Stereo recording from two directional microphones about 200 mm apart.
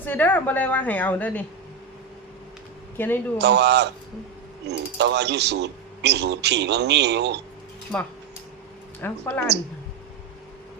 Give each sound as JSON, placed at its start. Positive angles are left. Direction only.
{"t": 0.0, "sound": "a woman's voice", "side_deg": 10}
{"t": 3.0, "sound": "a woman's voice", "side_deg": 10}
{"t": 3.3, "sound": "speech", "side_deg": -55}
{"t": 9.0, "sound": "a woman's voice", "side_deg": 10}